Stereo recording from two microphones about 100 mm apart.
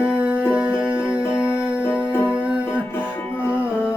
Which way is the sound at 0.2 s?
10° right (ahead or behind).